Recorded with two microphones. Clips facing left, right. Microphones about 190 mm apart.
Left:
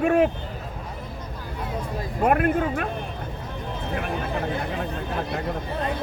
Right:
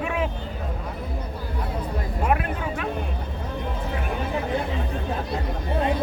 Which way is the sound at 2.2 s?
50° left (ahead or behind).